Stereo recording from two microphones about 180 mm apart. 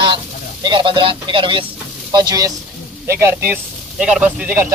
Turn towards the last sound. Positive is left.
turn(degrees=-10)  # may be behind; listen again after turning